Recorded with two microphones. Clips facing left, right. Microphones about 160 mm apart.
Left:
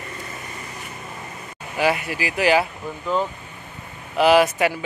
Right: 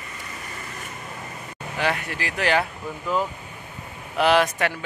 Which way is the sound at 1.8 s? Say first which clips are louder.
Left 5 dB; 10° left (ahead or behind).